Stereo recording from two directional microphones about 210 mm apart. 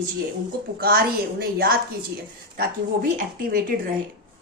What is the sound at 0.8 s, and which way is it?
Speech, 45° right (ahead or behind).